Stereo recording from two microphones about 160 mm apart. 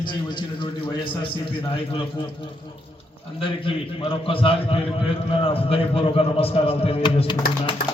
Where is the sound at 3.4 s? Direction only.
35° left (ahead or behind).